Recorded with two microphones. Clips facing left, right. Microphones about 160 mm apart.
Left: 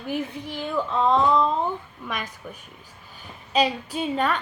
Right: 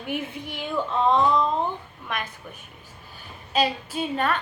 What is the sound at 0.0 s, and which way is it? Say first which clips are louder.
Speech: left 2 dB; 35° left (ahead or behind).